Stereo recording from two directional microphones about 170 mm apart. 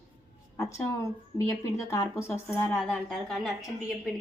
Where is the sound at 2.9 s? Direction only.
Centre (ahead or behind).